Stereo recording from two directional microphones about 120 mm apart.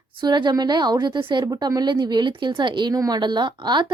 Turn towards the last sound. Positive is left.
turn(degrees=-40)  # may be behind; listen again after turning